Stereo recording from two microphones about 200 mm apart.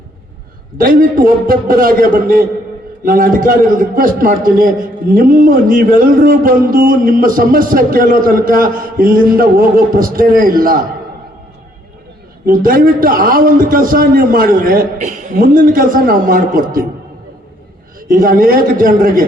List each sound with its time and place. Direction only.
0.8 s a man's voice: 45° right (ahead or behind)
12.5 s a man's voice: 45° right (ahead or behind)
18.1 s a man's voice: 45° right (ahead or behind)